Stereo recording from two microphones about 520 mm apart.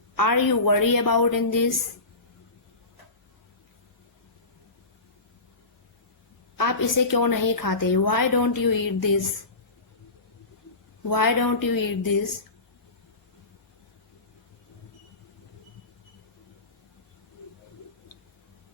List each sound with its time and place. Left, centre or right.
0.2 s a woman's voice: left
6.6 s a woman's voice: left
11.1 s a woman's voice: left